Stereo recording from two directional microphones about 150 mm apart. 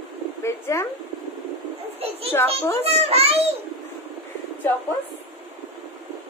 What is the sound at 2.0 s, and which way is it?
Children playing, 40° right (ahead or behind).